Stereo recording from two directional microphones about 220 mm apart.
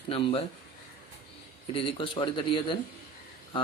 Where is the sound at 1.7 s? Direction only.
25° left (ahead or behind).